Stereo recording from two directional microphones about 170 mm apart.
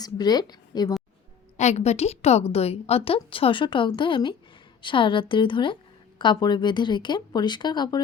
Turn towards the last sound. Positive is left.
turn(degrees=25)  # may be behind; listen again after turning